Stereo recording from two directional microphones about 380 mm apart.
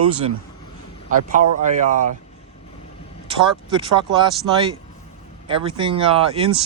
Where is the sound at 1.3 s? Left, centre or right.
Centre.